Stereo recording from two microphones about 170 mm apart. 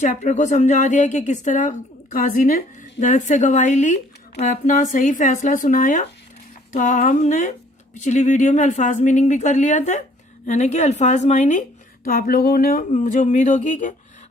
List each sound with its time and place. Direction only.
0.0 s speech: 45° left (ahead or behind)
12.0 s speech: 60° left (ahead or behind)